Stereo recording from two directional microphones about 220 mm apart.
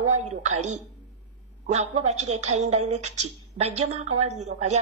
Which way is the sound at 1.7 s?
30° right (ahead or behind).